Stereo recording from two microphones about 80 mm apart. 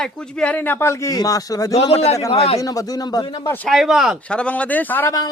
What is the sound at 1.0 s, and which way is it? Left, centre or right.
Speech, left.